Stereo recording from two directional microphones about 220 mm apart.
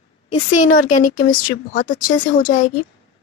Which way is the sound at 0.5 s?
35° left (ahead or behind).